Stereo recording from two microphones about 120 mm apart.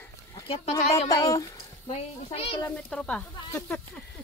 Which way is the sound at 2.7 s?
10° left (ahead or behind).